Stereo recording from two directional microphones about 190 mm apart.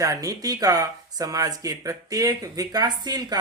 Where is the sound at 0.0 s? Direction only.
20° right (ahead or behind).